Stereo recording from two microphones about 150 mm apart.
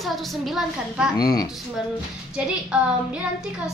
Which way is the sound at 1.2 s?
25° left (ahead or behind).